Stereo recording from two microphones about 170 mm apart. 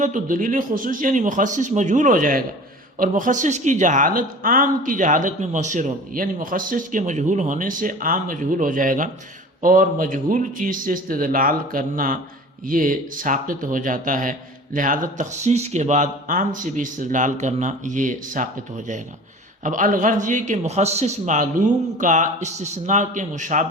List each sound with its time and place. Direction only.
0.0 s speech: 50° right (ahead or behind)
19.6 s speech: 50° right (ahead or behind)